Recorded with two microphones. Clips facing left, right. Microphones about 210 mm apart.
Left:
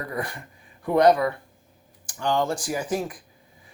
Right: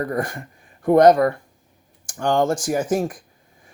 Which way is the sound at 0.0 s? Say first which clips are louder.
Right 7 dB; 45° right (ahead or behind).